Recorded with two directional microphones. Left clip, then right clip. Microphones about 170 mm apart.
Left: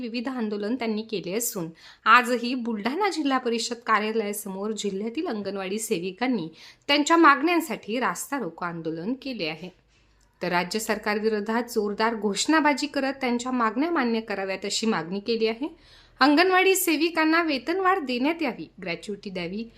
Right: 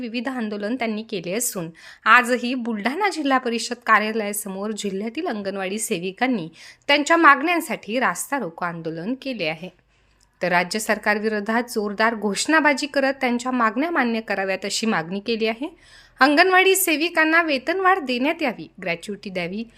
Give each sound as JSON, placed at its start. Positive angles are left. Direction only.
{"t": 0.0, "sound": "a woman's voice", "side_deg": -15}